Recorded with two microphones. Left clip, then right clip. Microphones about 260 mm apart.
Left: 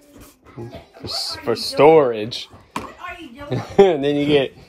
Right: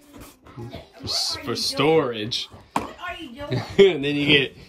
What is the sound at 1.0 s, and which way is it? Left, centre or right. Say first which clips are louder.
Speech: even; centre.